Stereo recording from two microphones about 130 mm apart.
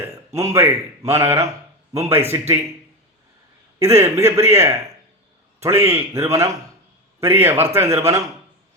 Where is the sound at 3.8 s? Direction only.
20° right (ahead or behind).